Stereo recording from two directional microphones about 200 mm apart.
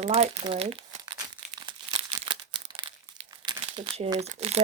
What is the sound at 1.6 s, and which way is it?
Crumpling, 25° right (ahead or behind).